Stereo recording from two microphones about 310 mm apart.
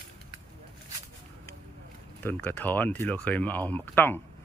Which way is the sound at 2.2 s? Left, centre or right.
Centre.